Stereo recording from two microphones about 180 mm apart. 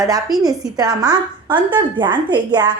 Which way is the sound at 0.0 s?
20° right (ahead or behind).